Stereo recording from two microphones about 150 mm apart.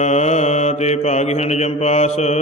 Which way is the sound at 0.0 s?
50° left (ahead or behind).